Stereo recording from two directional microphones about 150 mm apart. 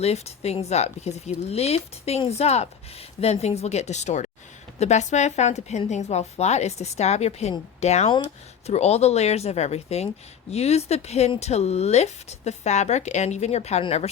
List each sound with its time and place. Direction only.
0.0 s speech: 45° left (ahead or behind)